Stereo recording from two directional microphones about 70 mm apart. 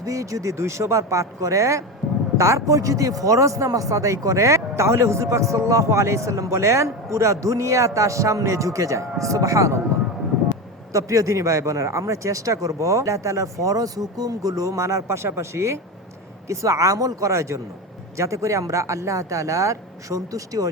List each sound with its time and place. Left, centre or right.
0.0 s speech: right
10.9 s speech: right